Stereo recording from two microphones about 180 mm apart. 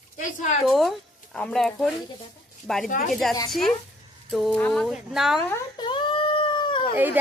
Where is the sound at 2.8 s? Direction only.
50° left (ahead or behind).